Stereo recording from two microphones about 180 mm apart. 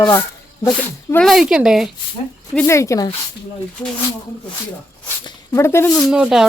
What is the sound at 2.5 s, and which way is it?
Speech, 10° left (ahead or behind).